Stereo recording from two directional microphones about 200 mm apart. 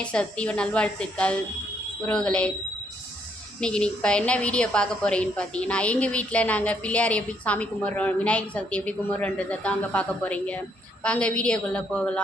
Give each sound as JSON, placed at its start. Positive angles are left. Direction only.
{"t": 0.0, "sound": "a woman's voice", "side_deg": 5}
{"t": 3.6, "sound": "a woman's voice", "side_deg": 5}